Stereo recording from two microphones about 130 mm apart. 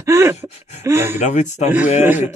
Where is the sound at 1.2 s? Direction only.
65° left (ahead or behind).